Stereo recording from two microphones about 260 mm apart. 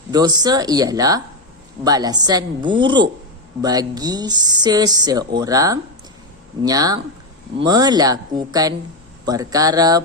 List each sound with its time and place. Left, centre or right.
0.1 s speech: centre